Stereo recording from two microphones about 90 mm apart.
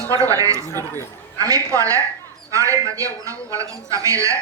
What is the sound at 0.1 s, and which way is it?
A man's voice, 40° right (ahead or behind).